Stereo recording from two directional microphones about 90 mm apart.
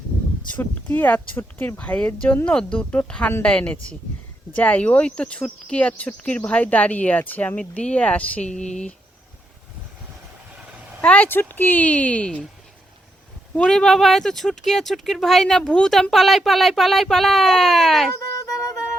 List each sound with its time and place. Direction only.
0.5 s speech: 20° left (ahead or behind)
11.0 s speech: 20° left (ahead or behind)
13.6 s speech: 10° left (ahead or behind)